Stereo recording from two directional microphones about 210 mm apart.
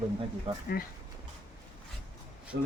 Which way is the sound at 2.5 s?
45° right (ahead or behind).